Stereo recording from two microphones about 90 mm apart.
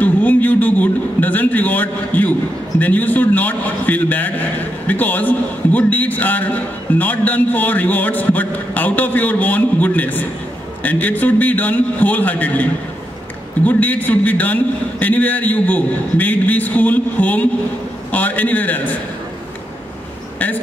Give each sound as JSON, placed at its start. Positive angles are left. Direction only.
{"t": 0.0, "sound": "a man's voice", "side_deg": 20}
{"t": 13.7, "sound": "a man's voice", "side_deg": 20}